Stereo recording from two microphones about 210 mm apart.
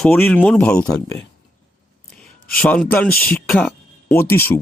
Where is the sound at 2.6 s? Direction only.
5° left (ahead or behind).